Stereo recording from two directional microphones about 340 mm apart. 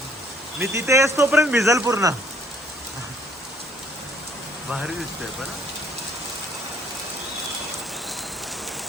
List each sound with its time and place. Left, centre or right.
0.6 s speech: centre